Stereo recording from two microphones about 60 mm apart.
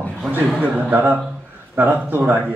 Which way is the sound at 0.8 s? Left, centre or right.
Right.